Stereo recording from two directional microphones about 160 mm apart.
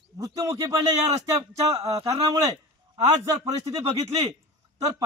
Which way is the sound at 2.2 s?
20° right (ahead or behind).